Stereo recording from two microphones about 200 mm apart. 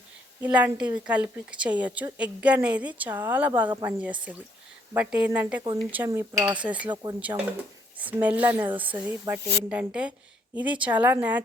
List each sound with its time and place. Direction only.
0.4 s a woman's voice: 5° right (ahead or behind)
3.7 s speech: 20° right (ahead or behind)
4.3 s a woman's voice: 5° right (ahead or behind)
6.9 s speech: 20° right (ahead or behind)
7.2 s a woman's voice: 5° right (ahead or behind)